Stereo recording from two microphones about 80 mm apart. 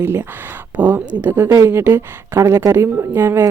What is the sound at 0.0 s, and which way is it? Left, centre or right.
Speech, right.